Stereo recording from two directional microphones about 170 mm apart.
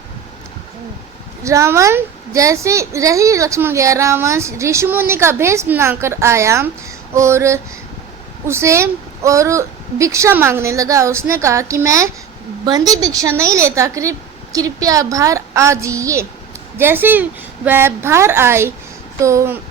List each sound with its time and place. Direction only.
1.5 s a woman's voice: 15° right (ahead or behind)